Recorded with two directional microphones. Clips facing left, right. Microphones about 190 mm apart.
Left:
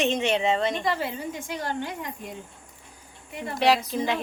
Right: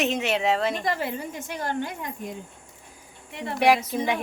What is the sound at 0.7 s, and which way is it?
Speech, 45° right (ahead or behind).